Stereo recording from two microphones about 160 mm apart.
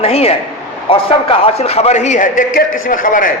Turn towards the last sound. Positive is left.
turn(degrees=60)  # may be behind; listen again after turning